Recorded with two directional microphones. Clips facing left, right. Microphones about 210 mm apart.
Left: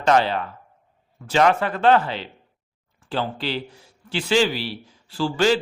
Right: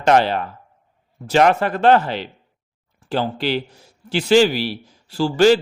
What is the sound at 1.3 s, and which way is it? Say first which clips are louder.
Speech: right 3 dB; 40° right (ahead or behind).